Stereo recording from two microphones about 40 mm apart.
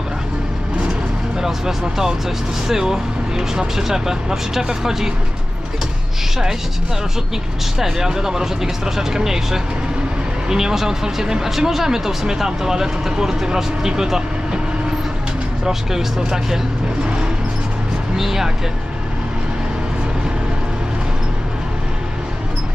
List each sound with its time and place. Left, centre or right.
1.4 s speech: centre
7.8 s speech: centre
15.6 s speech: centre
18.2 s speech: centre